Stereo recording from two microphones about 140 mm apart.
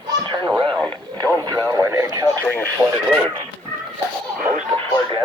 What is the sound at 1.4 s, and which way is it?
Radio, 25° right (ahead or behind).